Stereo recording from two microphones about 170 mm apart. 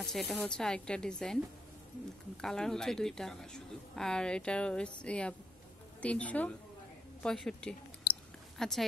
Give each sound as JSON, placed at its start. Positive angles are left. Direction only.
{"t": 0.0, "sound": "a woman's voice", "side_deg": 0}
{"t": 2.4, "sound": "a woman's voice", "side_deg": 5}